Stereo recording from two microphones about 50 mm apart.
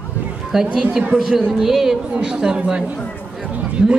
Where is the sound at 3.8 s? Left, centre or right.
Centre.